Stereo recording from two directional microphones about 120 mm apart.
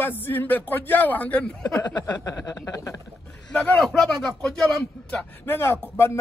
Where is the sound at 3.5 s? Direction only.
5° left (ahead or behind).